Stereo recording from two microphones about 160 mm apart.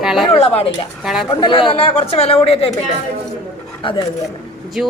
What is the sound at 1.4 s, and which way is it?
A woman's voice, 30° left (ahead or behind).